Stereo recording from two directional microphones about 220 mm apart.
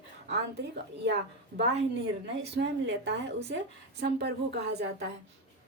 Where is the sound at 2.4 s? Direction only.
50° right (ahead or behind).